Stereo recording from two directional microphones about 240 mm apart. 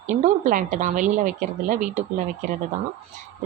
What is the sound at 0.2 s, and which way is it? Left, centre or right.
Speech, right.